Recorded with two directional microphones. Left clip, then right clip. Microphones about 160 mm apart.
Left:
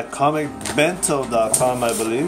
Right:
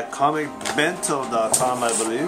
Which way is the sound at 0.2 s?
25° left (ahead or behind).